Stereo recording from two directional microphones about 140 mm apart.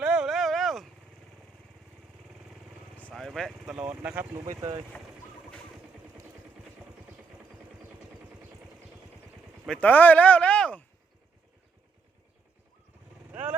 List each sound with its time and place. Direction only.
0.0 s a sound: 5° right (ahead or behind)
2.9 s speech: 5° left (ahead or behind); by 4.3 s 10° right (ahead or behind)
4.4 s speech: 25° right (ahead or behind)
9.6 s speech: 10° left (ahead or behind)
13.3 s vehicle: 10° right (ahead or behind)